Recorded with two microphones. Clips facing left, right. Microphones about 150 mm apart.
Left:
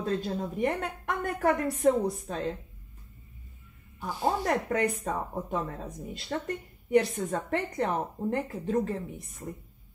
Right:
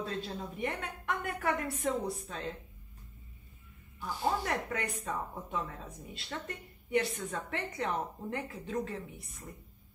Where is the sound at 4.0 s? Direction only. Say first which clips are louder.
Left 4 dB; 40° left (ahead or behind).